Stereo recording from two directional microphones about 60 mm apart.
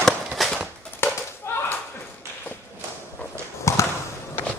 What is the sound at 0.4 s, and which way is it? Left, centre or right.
Horse, centre.